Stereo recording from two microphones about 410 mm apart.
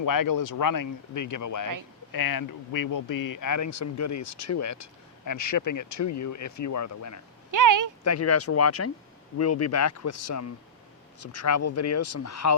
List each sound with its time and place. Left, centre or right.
0.0 s speech: left
7.5 s a sound: right
8.0 s speech: left